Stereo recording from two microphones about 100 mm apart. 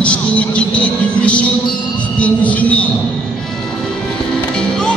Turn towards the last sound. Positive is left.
turn(degrees=10)  # may be behind; listen again after turning